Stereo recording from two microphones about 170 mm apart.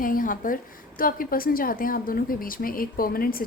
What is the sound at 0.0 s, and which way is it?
A woman's voice, 55° left (ahead or behind).